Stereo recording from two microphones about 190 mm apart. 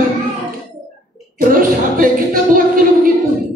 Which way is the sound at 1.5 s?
45° right (ahead or behind).